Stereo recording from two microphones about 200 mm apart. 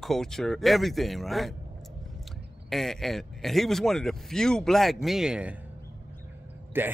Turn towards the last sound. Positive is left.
turn(degrees=-10)  # may be behind; listen again after turning